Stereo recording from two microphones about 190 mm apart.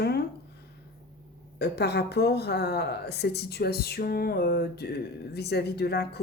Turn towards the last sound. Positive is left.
turn(degrees=60)  # may be behind; listen again after turning